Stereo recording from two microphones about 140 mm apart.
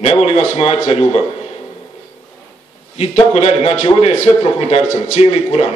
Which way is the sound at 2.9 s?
50° left (ahead or behind).